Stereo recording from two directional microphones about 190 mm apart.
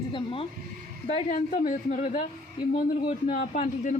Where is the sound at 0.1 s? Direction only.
30° left (ahead or behind).